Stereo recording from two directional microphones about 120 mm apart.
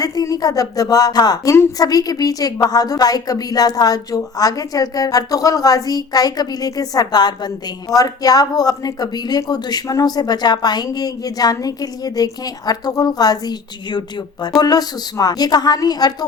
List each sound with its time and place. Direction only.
0.0 s a woman's voice: 30° left (ahead or behind)